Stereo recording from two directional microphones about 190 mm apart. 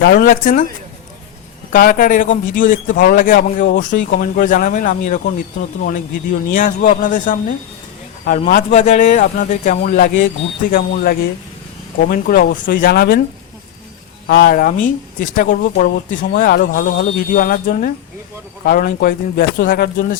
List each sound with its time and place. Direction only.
0.0 s a man's voice: 50° left (ahead or behind)
1.7 s a man's voice: 45° left (ahead or behind)
6.5 s a man's voice: 45° left (ahead or behind)
14.3 s a man's voice: 50° left (ahead or behind)